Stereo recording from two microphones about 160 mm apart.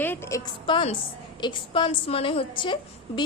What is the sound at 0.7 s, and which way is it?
A woman's voice, 35° left (ahead or behind).